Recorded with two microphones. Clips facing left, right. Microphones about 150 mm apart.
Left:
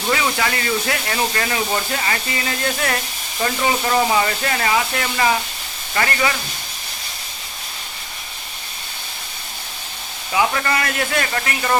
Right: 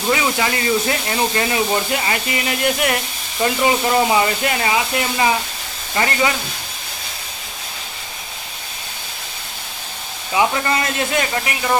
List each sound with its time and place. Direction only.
0.1 s speech: 20° right (ahead or behind)
10.3 s speech: 25° right (ahead or behind)